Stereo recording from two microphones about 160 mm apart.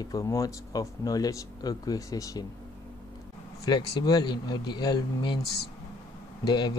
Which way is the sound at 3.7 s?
30° left (ahead or behind).